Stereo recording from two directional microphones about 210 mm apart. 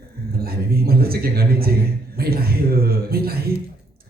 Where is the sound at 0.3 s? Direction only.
45° right (ahead or behind).